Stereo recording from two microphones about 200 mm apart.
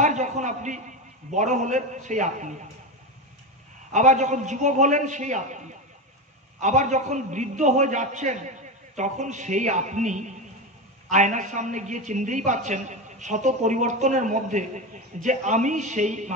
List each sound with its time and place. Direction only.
0.0 s a man's voice: 35° right (ahead or behind)
3.9 s a man's voice: 35° right (ahead or behind)
6.6 s a man's voice: 35° right (ahead or behind)